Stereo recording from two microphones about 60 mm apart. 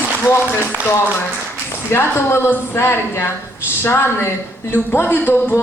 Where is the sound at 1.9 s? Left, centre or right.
Left.